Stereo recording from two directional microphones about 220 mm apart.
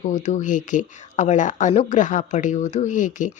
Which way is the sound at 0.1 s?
35° left (ahead or behind).